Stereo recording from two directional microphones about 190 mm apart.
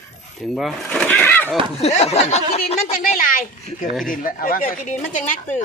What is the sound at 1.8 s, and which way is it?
Speech, 35° left (ahead or behind).